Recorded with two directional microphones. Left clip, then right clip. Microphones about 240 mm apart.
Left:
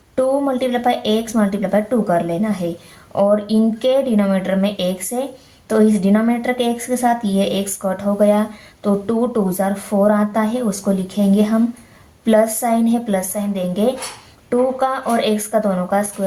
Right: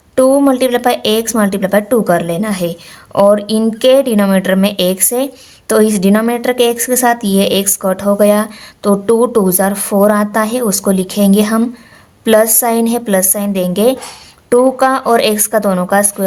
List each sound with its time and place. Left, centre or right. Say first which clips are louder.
0.2 s a woman's voice: right 8 dB; right